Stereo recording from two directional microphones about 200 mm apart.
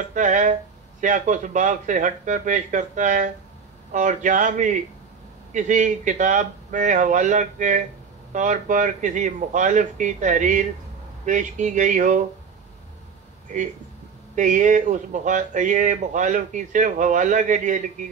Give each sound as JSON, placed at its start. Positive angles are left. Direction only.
{"t": 0.1, "sound": "speech", "side_deg": -40}
{"t": 14.3, "sound": "speech", "side_deg": -40}